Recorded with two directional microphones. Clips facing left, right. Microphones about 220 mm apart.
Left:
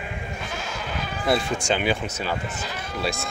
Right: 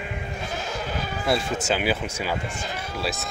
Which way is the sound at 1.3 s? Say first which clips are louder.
Left 1 dB; 5° right (ahead or behind).